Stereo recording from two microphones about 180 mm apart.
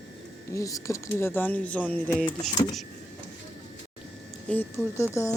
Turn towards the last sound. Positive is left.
turn(degrees=10)  # may be behind; listen again after turning